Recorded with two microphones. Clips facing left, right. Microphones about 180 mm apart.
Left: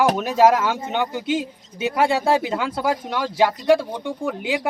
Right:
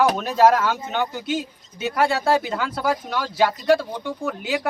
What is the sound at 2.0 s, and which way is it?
Speech, 20° left (ahead or behind).